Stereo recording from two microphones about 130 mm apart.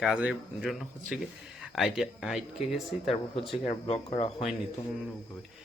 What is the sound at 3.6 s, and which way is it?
Speech, 45° left (ahead or behind).